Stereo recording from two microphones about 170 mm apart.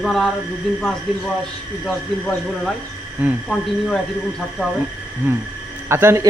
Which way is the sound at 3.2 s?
10° right (ahead or behind).